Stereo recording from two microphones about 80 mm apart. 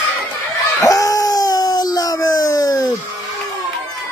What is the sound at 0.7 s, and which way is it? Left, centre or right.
Dog, left.